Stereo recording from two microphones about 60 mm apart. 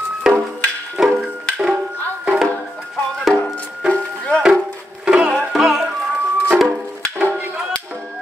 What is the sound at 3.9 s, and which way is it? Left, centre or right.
Music, centre.